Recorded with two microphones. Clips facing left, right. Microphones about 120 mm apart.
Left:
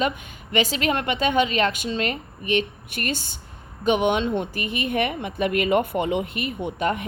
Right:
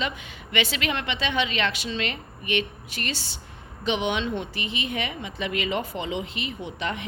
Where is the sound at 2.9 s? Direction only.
50° left (ahead or behind).